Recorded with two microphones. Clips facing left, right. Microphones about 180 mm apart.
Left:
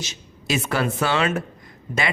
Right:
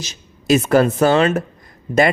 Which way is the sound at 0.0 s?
40° right (ahead or behind).